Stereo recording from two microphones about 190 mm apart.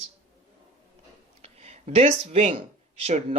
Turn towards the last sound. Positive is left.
turn(degrees=-35)  # may be behind; listen again after turning